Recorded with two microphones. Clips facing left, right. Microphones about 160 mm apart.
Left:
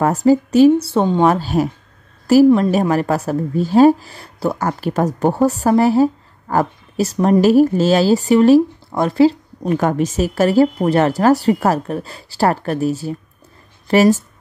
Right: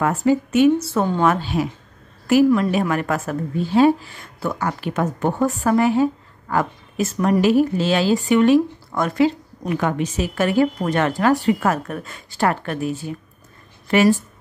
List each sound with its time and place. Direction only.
0.0 s a woman's voice: 35° left (ahead or behind)